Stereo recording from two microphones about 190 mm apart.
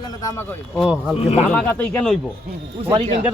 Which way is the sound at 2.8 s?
30° right (ahead or behind).